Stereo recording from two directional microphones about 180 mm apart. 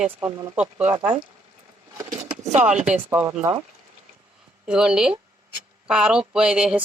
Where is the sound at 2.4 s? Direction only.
40° right (ahead or behind).